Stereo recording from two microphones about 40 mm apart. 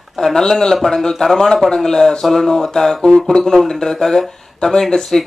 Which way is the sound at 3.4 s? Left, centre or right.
Centre.